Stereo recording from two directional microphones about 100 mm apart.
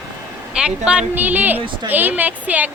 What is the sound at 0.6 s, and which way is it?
Speech, 10° right (ahead or behind).